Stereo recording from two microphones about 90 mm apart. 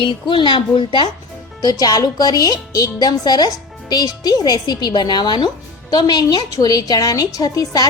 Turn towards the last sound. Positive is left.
turn(degrees=45)  # may be behind; listen again after turning